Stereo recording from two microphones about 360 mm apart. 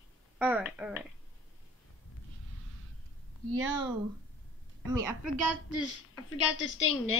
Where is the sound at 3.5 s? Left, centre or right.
Right.